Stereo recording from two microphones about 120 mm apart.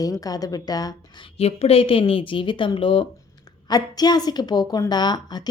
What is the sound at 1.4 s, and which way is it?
A woman's voice, 55° left (ahead or behind).